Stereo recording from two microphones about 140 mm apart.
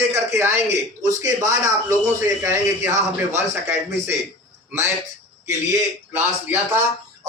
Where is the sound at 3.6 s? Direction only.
20° right (ahead or behind).